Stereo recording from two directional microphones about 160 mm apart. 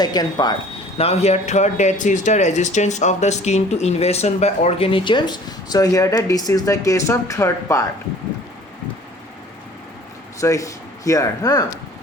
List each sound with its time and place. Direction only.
0.0 s speech: 25° left (ahead or behind)
0.9 s speech: 40° left (ahead or behind); by 7.9 s 20° left (ahead or behind)
10.4 s speech: 20° left (ahead or behind)